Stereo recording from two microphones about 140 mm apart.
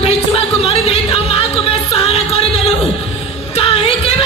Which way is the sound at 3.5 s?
45° left (ahead or behind).